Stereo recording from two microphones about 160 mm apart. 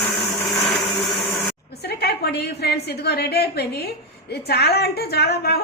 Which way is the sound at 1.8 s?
90° left.